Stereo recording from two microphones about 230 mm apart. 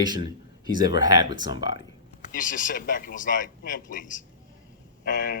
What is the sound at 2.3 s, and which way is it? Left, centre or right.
Speech, left.